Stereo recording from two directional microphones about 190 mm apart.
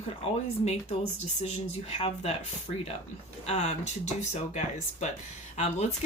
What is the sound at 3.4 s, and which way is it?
Speech, 35° left (ahead or behind).